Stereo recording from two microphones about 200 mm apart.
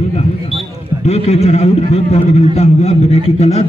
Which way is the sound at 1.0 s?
30° left (ahead or behind).